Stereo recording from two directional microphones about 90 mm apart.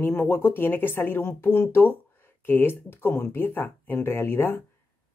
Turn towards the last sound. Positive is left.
turn(degrees=25)  # may be behind; listen again after turning